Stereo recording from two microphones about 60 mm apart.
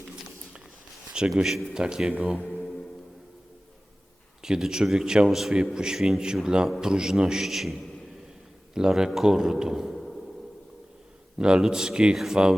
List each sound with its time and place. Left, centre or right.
1.3 s speech: centre
2.4 s music: centre
4.4 s speech: centre
9.9 s a sound: centre
11.3 s speech: centre